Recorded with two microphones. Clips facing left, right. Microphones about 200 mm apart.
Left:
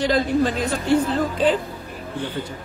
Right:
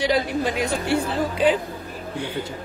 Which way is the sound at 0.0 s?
10° right (ahead or behind).